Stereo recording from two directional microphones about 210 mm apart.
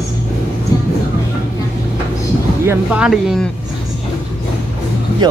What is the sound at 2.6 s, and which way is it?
Speech, 10° right (ahead or behind).